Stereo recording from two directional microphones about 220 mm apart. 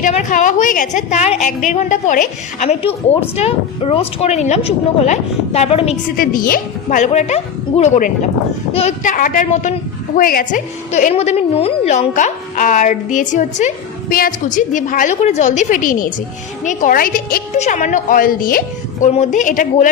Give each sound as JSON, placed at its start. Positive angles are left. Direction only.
{"t": 0.0, "sound": "a woman's voice", "side_deg": 35}
{"t": 6.1, "sound": "a woman's voice", "side_deg": 40}